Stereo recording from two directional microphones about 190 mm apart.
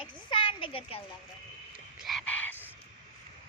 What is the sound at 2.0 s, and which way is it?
Frog, 5° left (ahead or behind).